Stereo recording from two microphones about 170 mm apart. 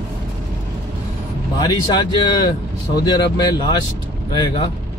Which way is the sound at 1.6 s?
25° left (ahead or behind).